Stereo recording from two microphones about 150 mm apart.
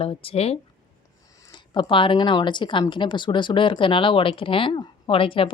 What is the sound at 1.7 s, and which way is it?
Speech, 35° left (ahead or behind).